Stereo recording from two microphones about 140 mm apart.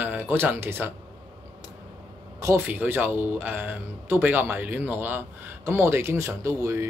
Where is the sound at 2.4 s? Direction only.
20° right (ahead or behind).